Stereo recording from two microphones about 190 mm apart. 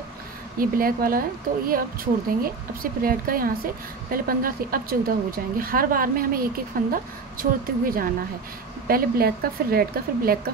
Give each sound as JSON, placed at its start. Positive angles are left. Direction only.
{"t": 0.6, "sound": "a woman's voice", "side_deg": -50}